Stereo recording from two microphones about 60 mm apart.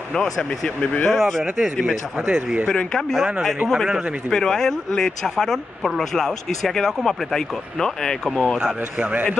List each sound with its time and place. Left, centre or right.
0.1 s speech: centre
2.7 s speech: centre
4.3 s speech: centre
8.5 s speech: centre
9.0 s a man's voice: right